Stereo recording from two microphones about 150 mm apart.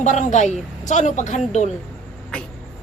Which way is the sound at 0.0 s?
50° left (ahead or behind).